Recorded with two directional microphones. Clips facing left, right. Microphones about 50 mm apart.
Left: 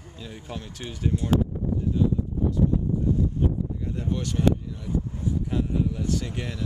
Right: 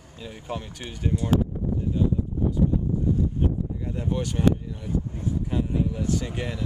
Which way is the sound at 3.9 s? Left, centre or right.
Centre.